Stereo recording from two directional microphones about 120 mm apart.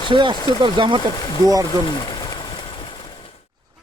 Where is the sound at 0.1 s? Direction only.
40° right (ahead or behind).